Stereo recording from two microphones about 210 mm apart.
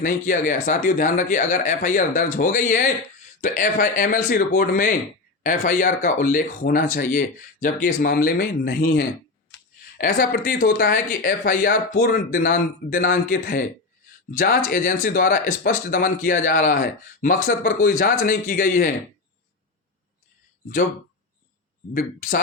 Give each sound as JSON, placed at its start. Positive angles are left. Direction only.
{"t": 0.0, "sound": "speech", "side_deg": 40}
{"t": 21.9, "sound": "speech", "side_deg": 40}